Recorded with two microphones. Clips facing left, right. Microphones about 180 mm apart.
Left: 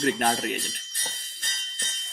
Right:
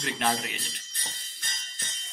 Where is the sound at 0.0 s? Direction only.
50° left (ahead or behind).